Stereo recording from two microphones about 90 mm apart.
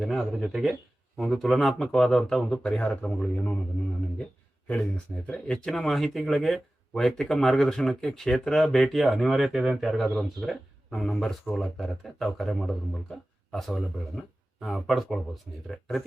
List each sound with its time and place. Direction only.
0.3 s speech: 5° right (ahead or behind); by 3.6 s 20° left (ahead or behind)
4.7 s speech: 10° left (ahead or behind)